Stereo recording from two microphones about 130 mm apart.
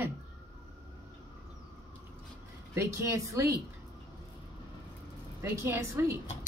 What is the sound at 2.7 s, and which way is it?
Speech, 20° right (ahead or behind).